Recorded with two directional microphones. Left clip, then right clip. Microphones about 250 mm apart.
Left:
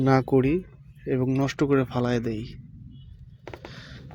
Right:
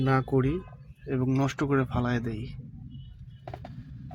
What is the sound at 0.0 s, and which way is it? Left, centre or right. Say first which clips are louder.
Speech: left 5 dB; left.